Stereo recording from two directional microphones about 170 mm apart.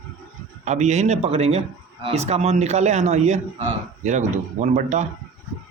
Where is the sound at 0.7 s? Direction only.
45° right (ahead or behind).